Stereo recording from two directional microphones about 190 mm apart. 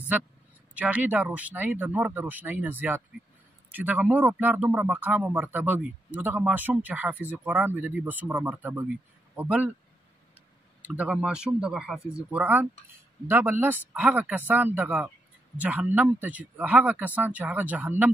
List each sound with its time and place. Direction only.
0.7 s speech: 10° right (ahead or behind)
10.8 s speech: 5° right (ahead or behind)